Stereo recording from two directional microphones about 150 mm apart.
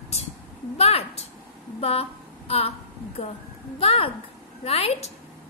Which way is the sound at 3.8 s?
35° left (ahead or behind).